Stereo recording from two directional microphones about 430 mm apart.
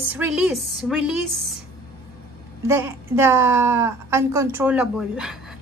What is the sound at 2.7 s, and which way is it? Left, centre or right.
A woman's voice, centre.